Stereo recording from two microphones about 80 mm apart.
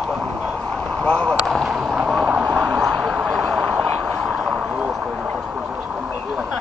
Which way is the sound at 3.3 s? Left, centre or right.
Centre.